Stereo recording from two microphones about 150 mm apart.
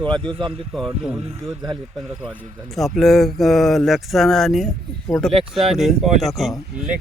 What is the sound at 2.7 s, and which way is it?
Speech, centre (ahead or behind).